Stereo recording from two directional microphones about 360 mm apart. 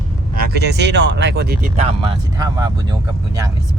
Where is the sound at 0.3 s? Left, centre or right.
Right.